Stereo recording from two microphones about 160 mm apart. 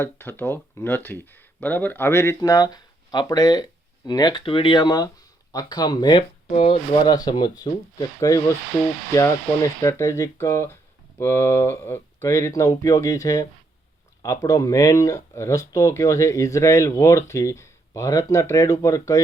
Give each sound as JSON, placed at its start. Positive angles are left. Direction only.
{"t": 0.0, "sound": "speech", "side_deg": 15}
{"t": 6.7, "sound": "speech", "side_deg": 35}
{"t": 7.1, "sound": "speech", "side_deg": 25}
{"t": 9.8, "sound": "speech", "side_deg": 20}